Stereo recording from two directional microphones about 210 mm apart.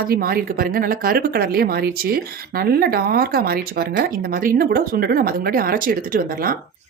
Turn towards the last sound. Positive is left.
turn(degrees=-45)  # may be behind; listen again after turning